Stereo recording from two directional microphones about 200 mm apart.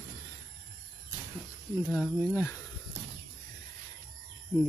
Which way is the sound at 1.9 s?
10° left (ahead or behind).